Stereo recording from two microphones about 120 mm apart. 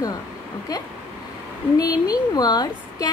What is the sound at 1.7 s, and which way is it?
A woman's voice, 30° left (ahead or behind).